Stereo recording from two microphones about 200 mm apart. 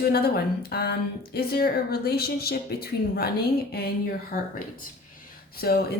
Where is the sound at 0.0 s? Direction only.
50° left (ahead or behind).